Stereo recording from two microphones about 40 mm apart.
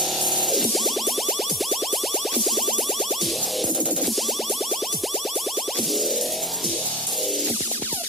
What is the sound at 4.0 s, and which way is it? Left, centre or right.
Music, centre.